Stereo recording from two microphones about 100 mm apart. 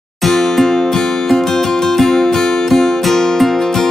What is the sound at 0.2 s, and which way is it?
Music, centre (ahead or behind).